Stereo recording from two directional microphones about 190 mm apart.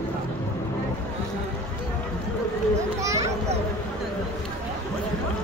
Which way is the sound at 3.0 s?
15° right (ahead or behind).